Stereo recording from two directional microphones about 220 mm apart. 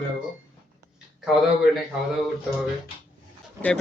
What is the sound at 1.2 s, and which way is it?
Speech, centre (ahead or behind).